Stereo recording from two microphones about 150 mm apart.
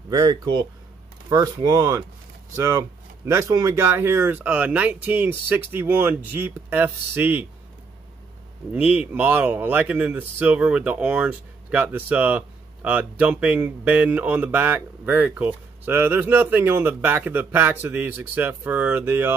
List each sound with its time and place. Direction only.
0.1 s speech: 30° right (ahead or behind)
8.7 s speech: 10° right (ahead or behind)